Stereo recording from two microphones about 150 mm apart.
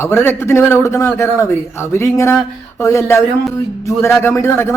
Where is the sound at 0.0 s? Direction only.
15° left (ahead or behind).